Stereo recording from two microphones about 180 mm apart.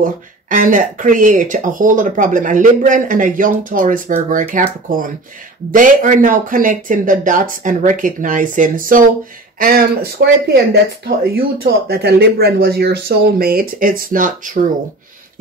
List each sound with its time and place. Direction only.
0.0 s speech: 50° right (ahead or behind)